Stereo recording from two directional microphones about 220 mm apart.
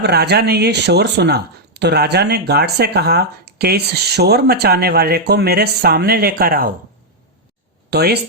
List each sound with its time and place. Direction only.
0.0 s speech: 50° right (ahead or behind)
7.9 s speech: 45° right (ahead or behind)